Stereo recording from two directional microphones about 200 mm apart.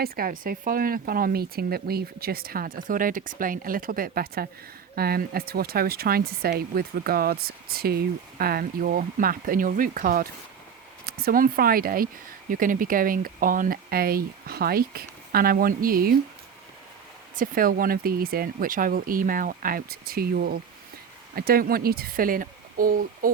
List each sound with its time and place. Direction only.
0.0 s speech: 45° right (ahead or behind)
17.3 s speech: 45° right (ahead or behind)